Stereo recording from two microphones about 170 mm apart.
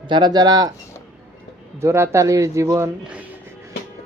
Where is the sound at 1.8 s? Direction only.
15° right (ahead or behind).